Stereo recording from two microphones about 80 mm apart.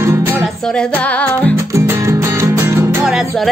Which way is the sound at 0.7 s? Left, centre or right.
Centre.